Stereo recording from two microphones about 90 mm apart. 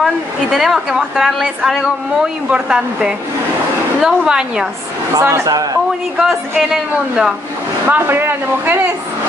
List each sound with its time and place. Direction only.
0.0 s a woman's voice: centre (ahead or behind)
5.2 s a man's voice: 35° right (ahead or behind)
6.1 s a woman's voice: centre (ahead or behind)
7.8 s speech: 25° right (ahead or behind)